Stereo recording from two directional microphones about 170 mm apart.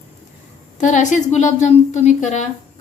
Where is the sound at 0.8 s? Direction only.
45° left (ahead or behind).